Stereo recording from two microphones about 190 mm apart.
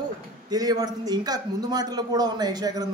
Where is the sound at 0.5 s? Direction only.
20° right (ahead or behind).